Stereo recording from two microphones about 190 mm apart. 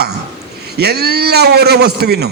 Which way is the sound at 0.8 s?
55° right (ahead or behind).